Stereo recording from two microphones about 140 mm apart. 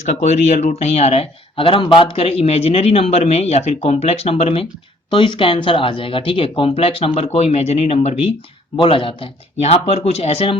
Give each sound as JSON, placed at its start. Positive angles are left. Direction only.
{"t": 0.0, "sound": "speech", "side_deg": 55}